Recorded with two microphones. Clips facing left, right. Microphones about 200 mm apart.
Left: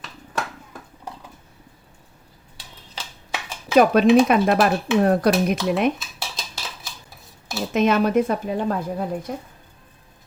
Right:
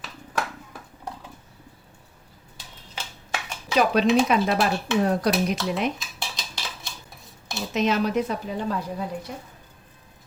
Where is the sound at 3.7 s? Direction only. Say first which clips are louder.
Left 6 dB; 50° left (ahead or behind).